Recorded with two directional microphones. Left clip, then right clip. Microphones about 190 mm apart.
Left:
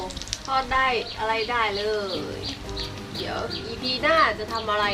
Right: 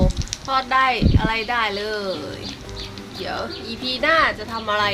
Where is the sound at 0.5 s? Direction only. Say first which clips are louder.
Right 4 dB; 60° right (ahead or behind).